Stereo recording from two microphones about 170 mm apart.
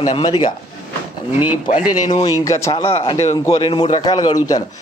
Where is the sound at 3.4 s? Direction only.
25° left (ahead or behind).